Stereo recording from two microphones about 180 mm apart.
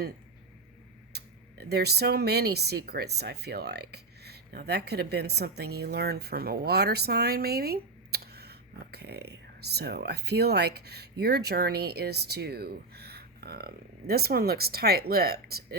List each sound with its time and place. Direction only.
1.1 s speech: 65° right (ahead or behind)